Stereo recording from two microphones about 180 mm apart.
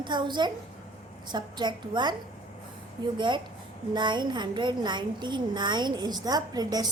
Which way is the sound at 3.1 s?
25° right (ahead or behind).